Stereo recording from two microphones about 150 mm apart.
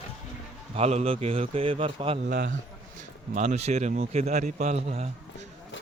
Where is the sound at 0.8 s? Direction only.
45° right (ahead or behind).